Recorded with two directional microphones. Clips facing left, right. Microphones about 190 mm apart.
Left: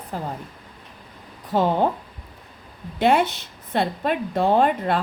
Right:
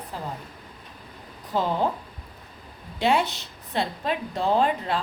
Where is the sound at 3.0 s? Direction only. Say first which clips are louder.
Left 4 dB; 55° left (ahead or behind).